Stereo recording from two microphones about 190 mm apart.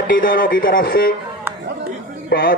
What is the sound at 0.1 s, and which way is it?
A man's voice, 45° left (ahead or behind).